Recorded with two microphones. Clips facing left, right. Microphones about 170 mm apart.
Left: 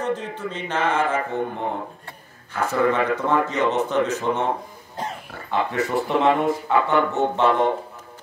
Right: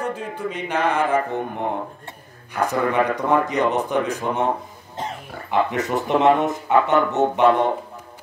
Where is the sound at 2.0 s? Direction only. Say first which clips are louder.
Right 2 dB; 15° right (ahead or behind).